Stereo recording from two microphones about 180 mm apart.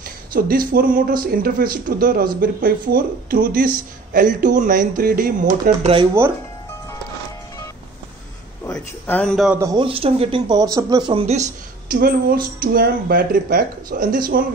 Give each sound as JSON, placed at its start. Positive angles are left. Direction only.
{"t": 0.3, "sound": "speech", "side_deg": -50}
{"t": 8.7, "sound": "a man's voice", "side_deg": 5}
{"t": 9.6, "sound": "speech", "side_deg": -20}
{"t": 9.8, "sound": "speech", "side_deg": -30}
{"t": 11.9, "sound": "speech", "side_deg": -55}